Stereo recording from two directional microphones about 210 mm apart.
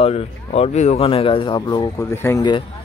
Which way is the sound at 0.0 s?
30° left (ahead or behind).